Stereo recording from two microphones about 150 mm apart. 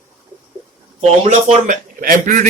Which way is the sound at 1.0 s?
45° right (ahead or behind).